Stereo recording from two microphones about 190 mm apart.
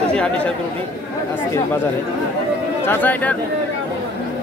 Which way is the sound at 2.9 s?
10° left (ahead or behind).